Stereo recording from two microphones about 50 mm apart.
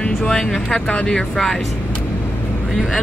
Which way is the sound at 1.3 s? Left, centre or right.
Centre.